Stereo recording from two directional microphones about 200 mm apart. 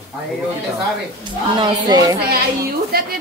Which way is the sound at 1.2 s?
25° right (ahead or behind).